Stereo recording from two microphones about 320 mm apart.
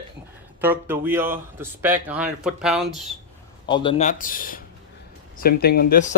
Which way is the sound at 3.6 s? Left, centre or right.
Centre.